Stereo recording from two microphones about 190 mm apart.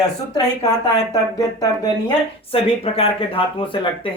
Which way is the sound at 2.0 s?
30° left (ahead or behind).